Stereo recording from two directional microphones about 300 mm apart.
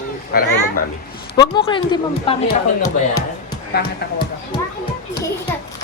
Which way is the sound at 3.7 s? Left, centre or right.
Left.